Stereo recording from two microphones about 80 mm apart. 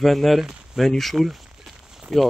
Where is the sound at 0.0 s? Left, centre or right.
Centre.